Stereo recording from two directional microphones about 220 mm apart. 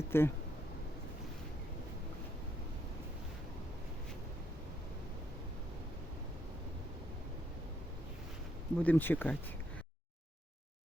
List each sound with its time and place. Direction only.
0.1 s speech: 10° left (ahead or behind)
8.8 s speech: 10° left (ahead or behind)